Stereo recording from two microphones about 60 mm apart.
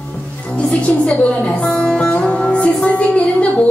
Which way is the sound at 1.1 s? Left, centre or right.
Centre.